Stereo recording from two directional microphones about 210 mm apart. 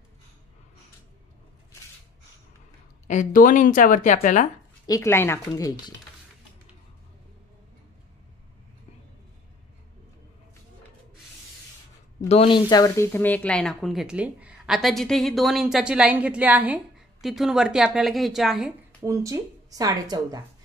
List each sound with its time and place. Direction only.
3.1 s a woman's voice: 40° left (ahead or behind)
4.8 s speech: 15° left (ahead or behind)
12.3 s speech: 25° left (ahead or behind); by 19.0 s centre (ahead or behind)
19.0 s speech: 15° right (ahead or behind)